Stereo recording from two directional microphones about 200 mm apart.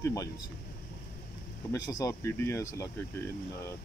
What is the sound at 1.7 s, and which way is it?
Speech, 20° left (ahead or behind).